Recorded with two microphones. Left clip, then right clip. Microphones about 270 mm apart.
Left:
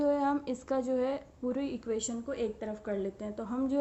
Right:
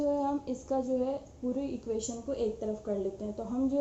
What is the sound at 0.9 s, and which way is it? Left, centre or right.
A woman's voice, left.